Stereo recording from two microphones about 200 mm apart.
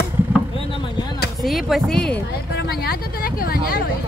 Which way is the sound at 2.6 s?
50° left (ahead or behind).